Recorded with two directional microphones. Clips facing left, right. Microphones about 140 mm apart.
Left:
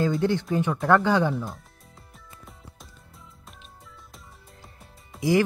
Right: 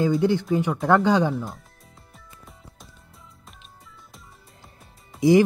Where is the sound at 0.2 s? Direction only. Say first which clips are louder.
Right 3 dB; 15° right (ahead or behind).